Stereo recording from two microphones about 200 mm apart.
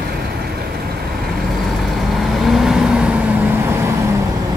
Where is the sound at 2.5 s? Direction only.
Centre (ahead or behind).